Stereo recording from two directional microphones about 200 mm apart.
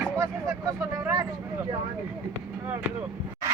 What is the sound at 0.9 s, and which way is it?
Speech, 15° right (ahead or behind).